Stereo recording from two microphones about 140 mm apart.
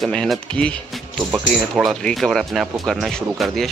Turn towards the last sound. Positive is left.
turn(degrees=0)  # may be behind; listen again after turning